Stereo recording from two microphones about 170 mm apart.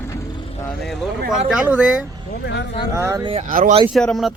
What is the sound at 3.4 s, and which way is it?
Speech, 50° right (ahead or behind).